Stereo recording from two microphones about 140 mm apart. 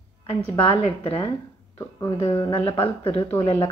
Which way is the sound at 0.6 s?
40° left (ahead or behind).